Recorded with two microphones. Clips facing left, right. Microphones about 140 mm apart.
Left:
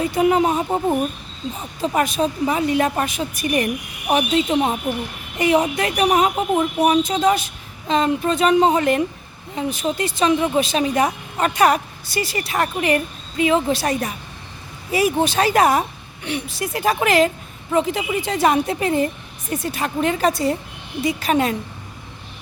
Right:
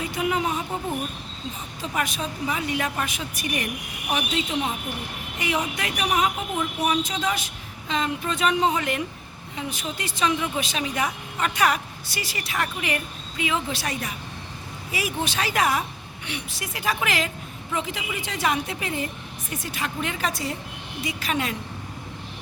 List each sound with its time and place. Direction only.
0.0 s speech: 40° left (ahead or behind)
4.5 s a woman's voice: 50° left (ahead or behind)
5.4 s speech: 35° left (ahead or behind)